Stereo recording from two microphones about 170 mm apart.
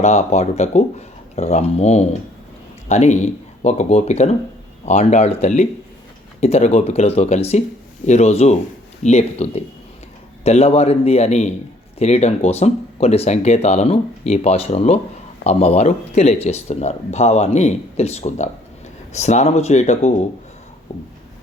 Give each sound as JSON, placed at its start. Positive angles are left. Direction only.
{"t": 0.0, "sound": "speech", "side_deg": 40}